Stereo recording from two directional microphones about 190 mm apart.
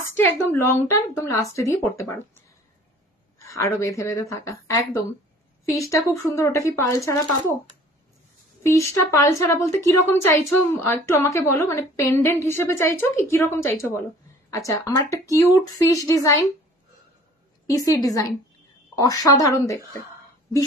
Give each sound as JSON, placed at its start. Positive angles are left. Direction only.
{"t": 0.0, "sound": "a woman's voice", "side_deg": 10}
{"t": 3.4, "sound": "a woman's voice", "side_deg": 15}
{"t": 8.6, "sound": "a woman's voice", "side_deg": 15}
{"t": 17.6, "sound": "a woman's voice", "side_deg": 20}